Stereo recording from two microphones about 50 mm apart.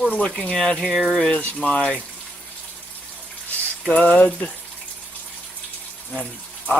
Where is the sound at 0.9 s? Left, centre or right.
Centre.